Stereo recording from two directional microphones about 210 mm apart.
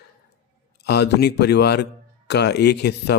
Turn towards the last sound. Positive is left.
turn(degrees=50)  # may be behind; listen again after turning